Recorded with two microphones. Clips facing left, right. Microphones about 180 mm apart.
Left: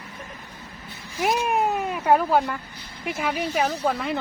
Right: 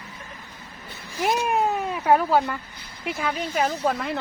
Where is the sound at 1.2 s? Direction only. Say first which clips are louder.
Even; centre (ahead or behind).